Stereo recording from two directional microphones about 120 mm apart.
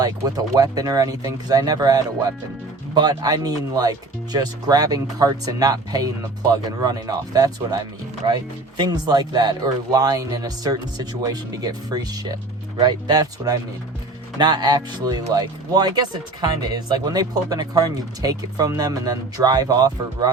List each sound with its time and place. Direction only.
0.0 s speech: 30° right (ahead or behind)